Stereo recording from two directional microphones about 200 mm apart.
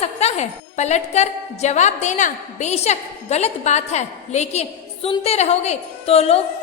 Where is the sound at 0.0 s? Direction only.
35° left (ahead or behind).